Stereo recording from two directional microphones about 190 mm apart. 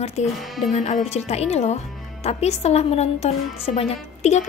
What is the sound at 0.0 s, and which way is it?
Speech, 35° left (ahead or behind).